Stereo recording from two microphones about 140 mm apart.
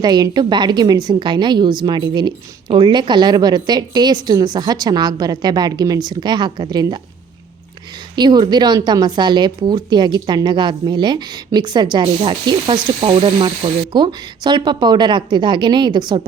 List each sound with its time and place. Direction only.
0.0 s a woman's voice: 30° right (ahead or behind)
8.1 s a woman's voice: 30° right (ahead or behind)